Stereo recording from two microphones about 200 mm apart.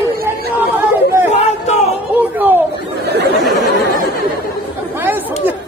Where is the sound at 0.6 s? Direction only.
10° right (ahead or behind).